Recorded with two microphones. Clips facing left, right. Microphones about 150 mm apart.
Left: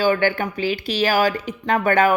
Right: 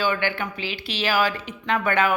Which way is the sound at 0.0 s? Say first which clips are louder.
Left 6 dB; 40° left (ahead or behind).